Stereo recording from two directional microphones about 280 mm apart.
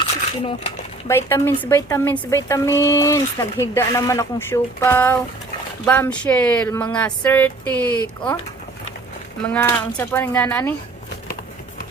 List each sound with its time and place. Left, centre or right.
0.4 s speech: centre
1.1 s a woman's voice: centre
9.5 s a woman's voice: centre